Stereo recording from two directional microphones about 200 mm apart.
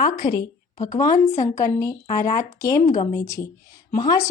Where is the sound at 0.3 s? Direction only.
20° left (ahead or behind).